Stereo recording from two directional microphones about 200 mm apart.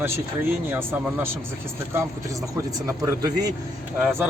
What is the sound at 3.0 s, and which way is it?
Speech, 15° right (ahead or behind).